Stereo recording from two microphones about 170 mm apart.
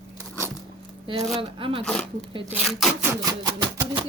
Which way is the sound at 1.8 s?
5° left (ahead or behind).